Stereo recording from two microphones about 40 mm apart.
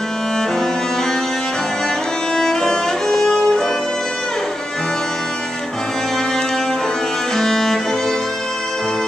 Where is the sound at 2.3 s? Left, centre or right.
Centre.